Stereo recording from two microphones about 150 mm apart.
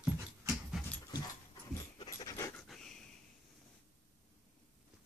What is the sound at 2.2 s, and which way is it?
Dog, 20° left (ahead or behind).